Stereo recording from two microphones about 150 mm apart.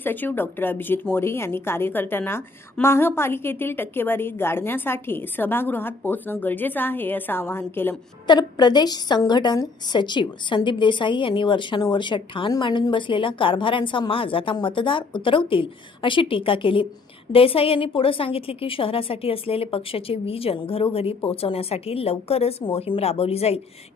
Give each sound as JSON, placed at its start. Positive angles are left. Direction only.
{"t": 0.0, "sound": "a woman's voice", "side_deg": 15}
{"t": 8.3, "sound": "a woman's voice", "side_deg": 30}